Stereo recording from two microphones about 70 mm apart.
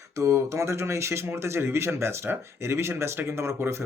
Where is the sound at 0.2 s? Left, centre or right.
Right.